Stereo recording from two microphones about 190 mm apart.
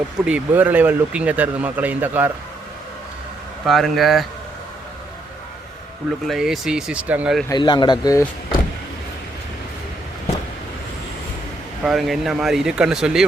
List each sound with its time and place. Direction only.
0.3 s speech: 5° right (ahead or behind)
3.7 s speech: centre (ahead or behind)
6.2 s speech: centre (ahead or behind)
7.4 s speech: 20° left (ahead or behind)
11.8 s speech: centre (ahead or behind)